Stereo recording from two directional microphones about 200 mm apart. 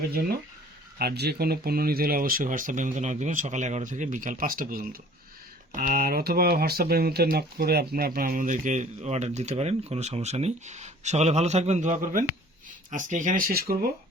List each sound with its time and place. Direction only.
0.9 s speech: 55° right (ahead or behind)